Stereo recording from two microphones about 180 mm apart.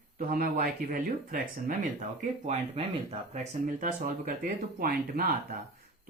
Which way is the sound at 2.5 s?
35° right (ahead or behind).